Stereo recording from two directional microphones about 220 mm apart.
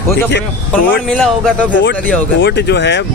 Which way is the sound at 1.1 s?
5° left (ahead or behind).